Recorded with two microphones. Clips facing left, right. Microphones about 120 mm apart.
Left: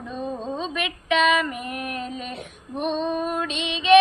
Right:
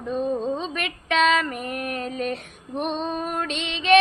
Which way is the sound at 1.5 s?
45° right (ahead or behind).